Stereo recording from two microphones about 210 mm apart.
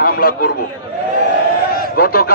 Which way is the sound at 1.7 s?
45° left (ahead or behind).